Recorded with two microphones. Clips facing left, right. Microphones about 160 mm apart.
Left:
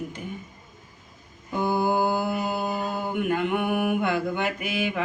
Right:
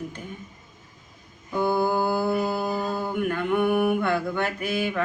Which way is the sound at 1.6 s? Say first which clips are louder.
Right 1 dB; 20° left (ahead or behind).